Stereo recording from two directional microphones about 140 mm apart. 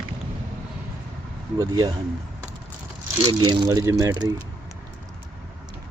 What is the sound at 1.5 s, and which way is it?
Speech, 30° right (ahead or behind).